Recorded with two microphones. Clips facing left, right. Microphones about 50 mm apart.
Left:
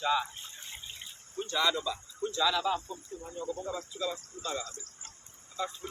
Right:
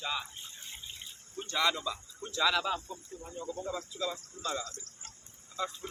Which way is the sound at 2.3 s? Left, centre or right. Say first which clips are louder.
Even; right.